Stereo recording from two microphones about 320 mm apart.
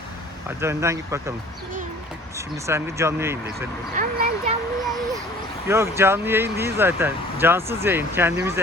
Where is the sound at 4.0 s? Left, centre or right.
Right.